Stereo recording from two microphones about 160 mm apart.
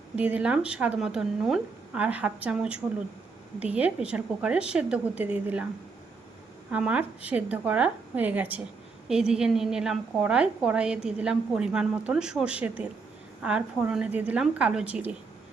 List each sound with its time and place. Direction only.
0.2 s speech: 10° right (ahead or behind)
6.7 s a woman's voice: 10° right (ahead or behind)